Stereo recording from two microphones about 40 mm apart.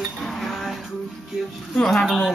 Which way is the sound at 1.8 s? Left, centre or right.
Centre.